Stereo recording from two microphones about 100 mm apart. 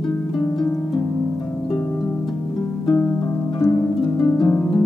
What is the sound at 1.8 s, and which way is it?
Music, 15° left (ahead or behind).